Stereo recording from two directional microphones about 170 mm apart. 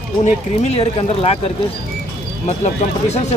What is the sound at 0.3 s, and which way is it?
Speech, 40° left (ahead or behind).